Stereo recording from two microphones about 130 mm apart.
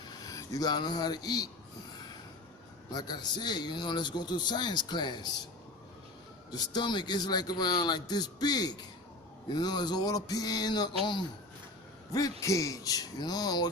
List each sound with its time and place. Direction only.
0.3 s speech: 25° left (ahead or behind)
2.9 s a man's voice: 30° left (ahead or behind)
6.5 s a man's voice: 35° left (ahead or behind)